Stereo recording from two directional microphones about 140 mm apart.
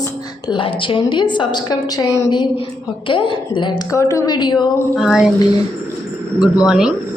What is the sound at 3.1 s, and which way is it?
A woman's voice, 35° left (ahead or behind).